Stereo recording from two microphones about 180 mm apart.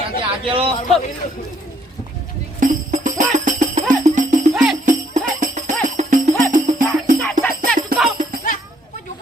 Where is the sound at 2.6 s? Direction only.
45° right (ahead or behind).